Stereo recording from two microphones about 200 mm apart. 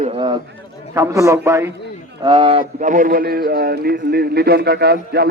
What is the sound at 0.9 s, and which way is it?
A man's voice, 15° right (ahead or behind).